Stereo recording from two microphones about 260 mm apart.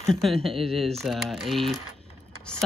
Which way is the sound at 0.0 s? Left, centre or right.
Centre.